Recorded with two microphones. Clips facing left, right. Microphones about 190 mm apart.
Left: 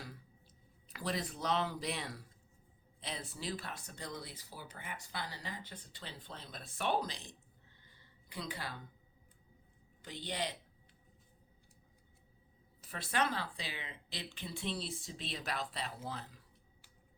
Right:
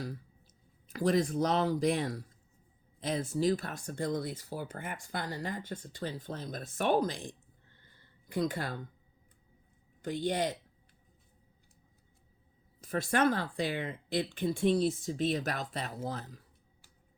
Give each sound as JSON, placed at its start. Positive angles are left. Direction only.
{"t": 0.9, "sound": "speech", "side_deg": -45}
{"t": 10.0, "sound": "speech", "side_deg": -50}
{"t": 12.8, "sound": "speech", "side_deg": -45}